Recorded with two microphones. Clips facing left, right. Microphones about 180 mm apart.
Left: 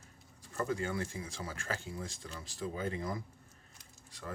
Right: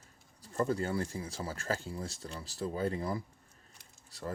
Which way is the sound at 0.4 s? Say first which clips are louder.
Right 3 dB; 35° right (ahead or behind).